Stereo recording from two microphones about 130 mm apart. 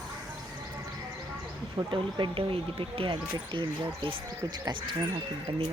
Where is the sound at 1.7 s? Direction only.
40° right (ahead or behind).